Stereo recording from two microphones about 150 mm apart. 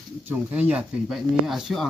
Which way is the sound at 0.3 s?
10° right (ahead or behind).